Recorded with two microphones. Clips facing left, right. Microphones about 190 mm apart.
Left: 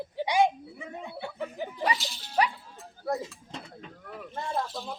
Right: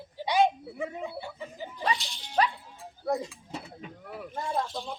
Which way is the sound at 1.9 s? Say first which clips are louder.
Even; 5° left (ahead or behind).